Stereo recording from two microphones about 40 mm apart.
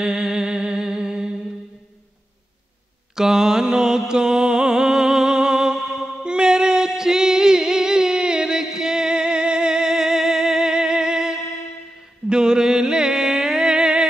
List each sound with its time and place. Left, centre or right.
0.0 s music: centre
3.2 s music: centre
12.3 s a sound: centre